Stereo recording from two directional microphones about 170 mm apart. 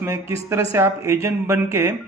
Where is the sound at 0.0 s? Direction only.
15° right (ahead or behind).